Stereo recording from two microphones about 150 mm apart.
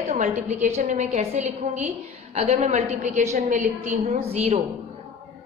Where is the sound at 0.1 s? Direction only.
50° right (ahead or behind).